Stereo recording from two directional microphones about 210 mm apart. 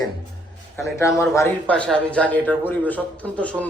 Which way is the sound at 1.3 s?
10° left (ahead or behind).